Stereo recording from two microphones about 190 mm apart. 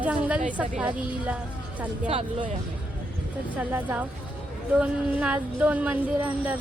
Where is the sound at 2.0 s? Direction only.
35° right (ahead or behind).